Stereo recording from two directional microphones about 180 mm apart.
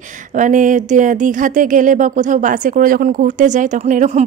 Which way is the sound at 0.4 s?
45° right (ahead or behind).